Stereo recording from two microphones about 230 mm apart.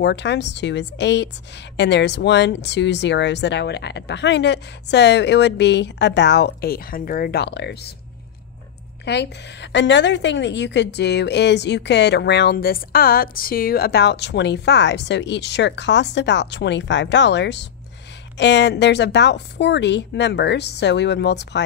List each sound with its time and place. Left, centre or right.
0.0 s a woman's voice: left
9.0 s a woman's voice: left